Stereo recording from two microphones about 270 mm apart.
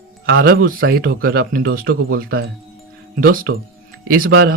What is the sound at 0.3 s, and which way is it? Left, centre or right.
Speech, right.